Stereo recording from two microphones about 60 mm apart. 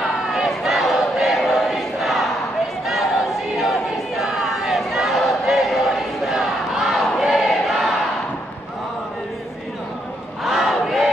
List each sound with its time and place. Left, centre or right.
0.3 s crowd: centre
3.5 s a sound: centre
10.4 s battle cry: centre